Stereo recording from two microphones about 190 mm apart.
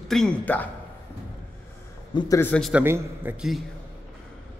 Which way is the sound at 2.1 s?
25° left (ahead or behind).